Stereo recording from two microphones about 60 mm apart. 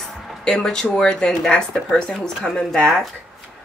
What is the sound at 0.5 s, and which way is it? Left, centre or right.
Speech, centre.